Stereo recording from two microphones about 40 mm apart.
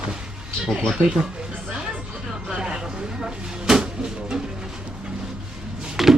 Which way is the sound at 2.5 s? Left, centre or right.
Centre.